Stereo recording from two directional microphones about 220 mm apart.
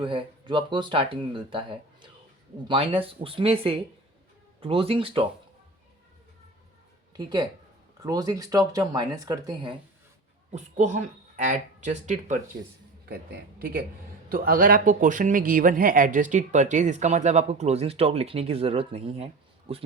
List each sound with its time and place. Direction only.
0.0 s speech: 20° right (ahead or behind)
7.1 s speech: 20° right (ahead or behind)
10.5 s speech: 30° right (ahead or behind)